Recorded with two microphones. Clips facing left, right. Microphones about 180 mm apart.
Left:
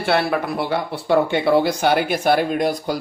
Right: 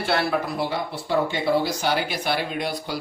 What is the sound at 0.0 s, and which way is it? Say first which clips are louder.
Speech: left 4 dB; 60° left (ahead or behind).